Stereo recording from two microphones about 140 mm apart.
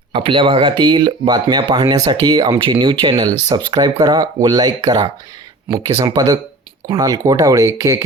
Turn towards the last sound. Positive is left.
turn(degrees=-20)  # may be behind; listen again after turning